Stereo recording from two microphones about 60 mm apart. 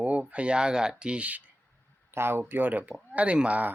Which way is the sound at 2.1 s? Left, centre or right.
Right.